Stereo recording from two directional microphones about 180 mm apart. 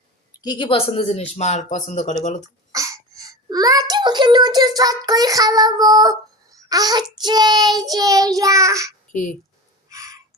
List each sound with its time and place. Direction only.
0.4 s speech: 25° left (ahead or behind); by 2.1 s 40° left (ahead or behind)
2.7 s a child's voice: 20° right (ahead or behind)
7.3 s child singing: 25° right (ahead or behind)
9.9 s a sound: 20° right (ahead or behind)